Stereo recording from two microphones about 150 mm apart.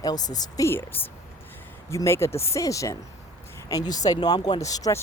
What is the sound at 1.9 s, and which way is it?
Speech, 20° left (ahead or behind).